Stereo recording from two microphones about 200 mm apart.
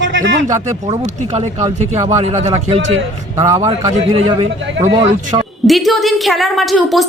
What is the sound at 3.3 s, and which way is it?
Speech, 15° right (ahead or behind).